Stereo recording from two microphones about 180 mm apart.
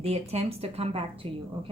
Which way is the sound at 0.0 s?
35° right (ahead or behind).